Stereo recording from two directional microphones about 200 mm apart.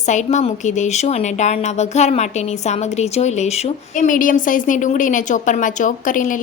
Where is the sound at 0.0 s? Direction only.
35° left (ahead or behind).